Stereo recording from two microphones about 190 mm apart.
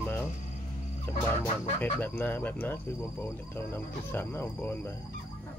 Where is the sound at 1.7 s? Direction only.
10° left (ahead or behind).